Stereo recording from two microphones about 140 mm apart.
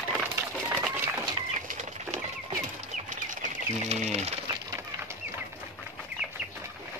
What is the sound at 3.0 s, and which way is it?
Bird, 60° right (ahead or behind).